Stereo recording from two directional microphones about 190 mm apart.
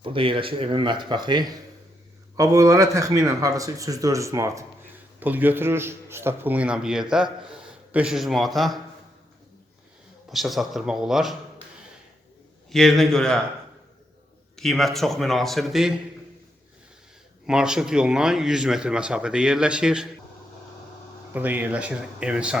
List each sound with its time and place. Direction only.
0.0 s a man's voice: 25° right (ahead or behind); by 8.8 s centre (ahead or behind)
10.2 s speech: centre (ahead or behind)
12.7 s speech: centre (ahead or behind)
14.5 s speech: centre (ahead or behind)
17.4 s speech: 5° right (ahead or behind)
21.3 s a man's voice: 10° right (ahead or behind)